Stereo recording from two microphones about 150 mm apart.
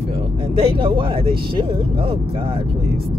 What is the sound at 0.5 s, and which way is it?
Speech, 40° right (ahead or behind).